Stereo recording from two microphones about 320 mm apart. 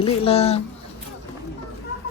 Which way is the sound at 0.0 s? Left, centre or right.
Centre.